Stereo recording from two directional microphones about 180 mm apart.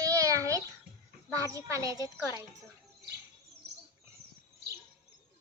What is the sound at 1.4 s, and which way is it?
Speech, 15° right (ahead or behind).